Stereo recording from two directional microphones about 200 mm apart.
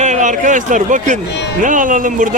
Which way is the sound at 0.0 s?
35° right (ahead or behind).